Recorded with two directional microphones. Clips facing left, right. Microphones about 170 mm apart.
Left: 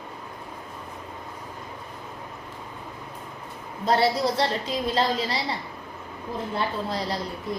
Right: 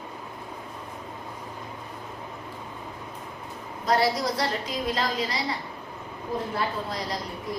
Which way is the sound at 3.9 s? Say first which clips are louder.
Left 2 dB; 30° left (ahead or behind).